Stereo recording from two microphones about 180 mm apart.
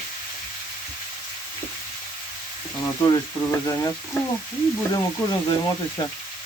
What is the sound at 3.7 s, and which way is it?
Speech, 15° left (ahead or behind).